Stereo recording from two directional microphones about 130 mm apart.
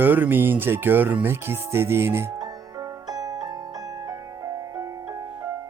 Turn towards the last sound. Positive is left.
turn(degrees=-25)  # may be behind; listen again after turning